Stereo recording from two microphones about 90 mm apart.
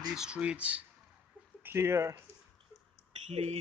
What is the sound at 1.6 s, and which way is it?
Speech, 25° right (ahead or behind).